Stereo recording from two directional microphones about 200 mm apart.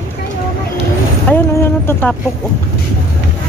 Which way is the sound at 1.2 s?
10° left (ahead or behind).